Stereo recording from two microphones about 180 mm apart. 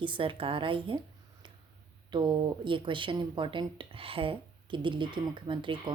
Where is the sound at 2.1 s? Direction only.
25° right (ahead or behind).